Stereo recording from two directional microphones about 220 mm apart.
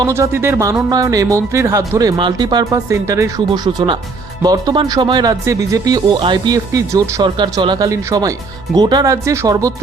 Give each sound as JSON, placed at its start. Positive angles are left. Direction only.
{"t": 0.0, "sound": "speech", "side_deg": -10}